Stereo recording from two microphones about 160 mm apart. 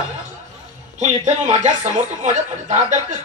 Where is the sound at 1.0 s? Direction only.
50° right (ahead or behind).